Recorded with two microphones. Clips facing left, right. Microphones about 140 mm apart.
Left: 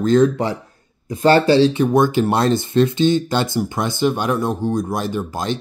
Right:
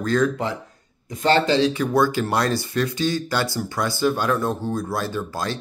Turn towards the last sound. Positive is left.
turn(degrees=20)  # may be behind; listen again after turning